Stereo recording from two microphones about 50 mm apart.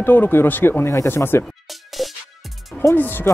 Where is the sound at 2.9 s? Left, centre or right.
Left.